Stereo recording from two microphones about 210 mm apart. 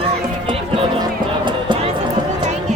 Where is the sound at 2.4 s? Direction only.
35° right (ahead or behind).